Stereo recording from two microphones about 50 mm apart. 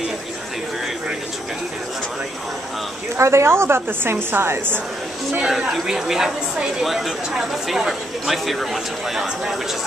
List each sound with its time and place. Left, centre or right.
3.2 s a woman's voice: right
5.6 s a woman's voice: centre